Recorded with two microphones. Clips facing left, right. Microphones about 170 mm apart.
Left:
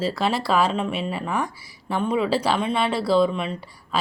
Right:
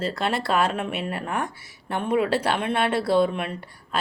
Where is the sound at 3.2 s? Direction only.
60° right (ahead or behind).